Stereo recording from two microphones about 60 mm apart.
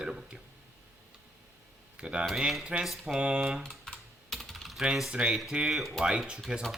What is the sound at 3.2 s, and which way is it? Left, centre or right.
Speech, centre.